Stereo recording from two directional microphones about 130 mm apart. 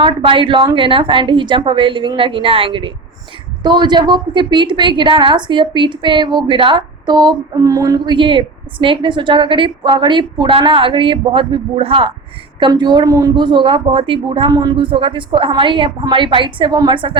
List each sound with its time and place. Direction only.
0.0 s a woman's voice: 40° right (ahead or behind)
14.5 s a woman's voice: 30° right (ahead or behind)